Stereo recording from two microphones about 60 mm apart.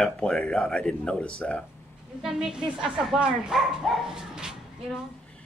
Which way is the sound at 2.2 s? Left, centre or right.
Centre.